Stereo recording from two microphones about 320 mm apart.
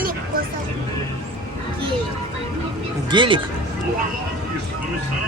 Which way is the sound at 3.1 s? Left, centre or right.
Centre.